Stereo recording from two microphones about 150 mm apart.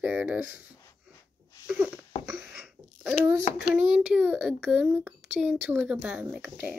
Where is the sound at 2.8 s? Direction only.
15° right (ahead or behind).